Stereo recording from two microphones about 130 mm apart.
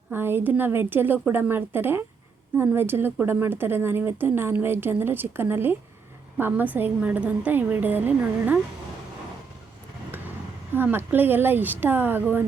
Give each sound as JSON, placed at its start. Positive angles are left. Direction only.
{"t": 0.1, "sound": "a woman's voice", "side_deg": -15}
{"t": 10.8, "sound": "a woman's voice", "side_deg": -15}